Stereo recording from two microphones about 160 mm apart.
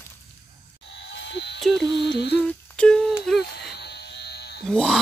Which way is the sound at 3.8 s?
90° left.